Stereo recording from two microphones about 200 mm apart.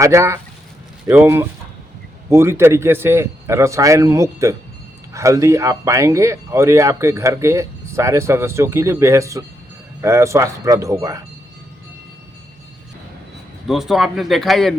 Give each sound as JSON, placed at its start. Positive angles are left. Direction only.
{"t": 0.0, "sound": "speech", "side_deg": -15}
{"t": 13.7, "sound": "speech", "side_deg": 0}